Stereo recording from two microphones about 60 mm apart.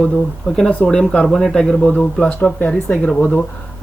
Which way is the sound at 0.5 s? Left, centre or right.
Centre.